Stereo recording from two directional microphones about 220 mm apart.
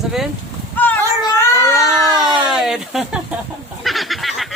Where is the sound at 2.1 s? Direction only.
20° right (ahead or behind).